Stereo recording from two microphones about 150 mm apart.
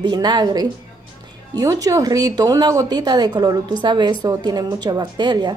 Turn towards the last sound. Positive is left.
turn(degrees=-30)  # may be behind; listen again after turning